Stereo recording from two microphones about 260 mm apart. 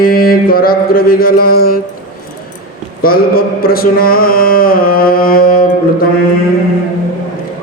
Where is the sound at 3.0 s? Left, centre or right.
Left.